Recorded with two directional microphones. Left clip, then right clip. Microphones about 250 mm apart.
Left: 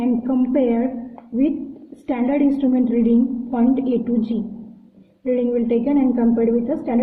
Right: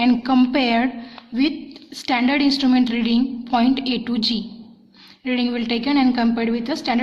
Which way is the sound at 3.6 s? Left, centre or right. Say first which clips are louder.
Even; right.